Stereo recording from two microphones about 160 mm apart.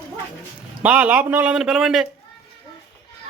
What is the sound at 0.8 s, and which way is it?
A man's voice, 10° right (ahead or behind).